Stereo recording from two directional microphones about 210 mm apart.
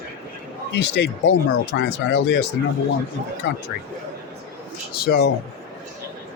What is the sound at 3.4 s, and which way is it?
Speech, 60° left (ahead or behind).